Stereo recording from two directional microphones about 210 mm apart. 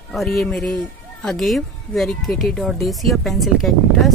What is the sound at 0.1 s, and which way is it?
Speech, centre (ahead or behind).